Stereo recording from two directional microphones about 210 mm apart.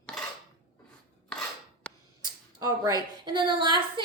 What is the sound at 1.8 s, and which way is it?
Tick, 5° left (ahead or behind).